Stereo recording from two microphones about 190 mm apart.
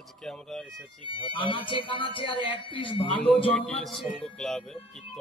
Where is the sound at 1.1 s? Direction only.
25° left (ahead or behind).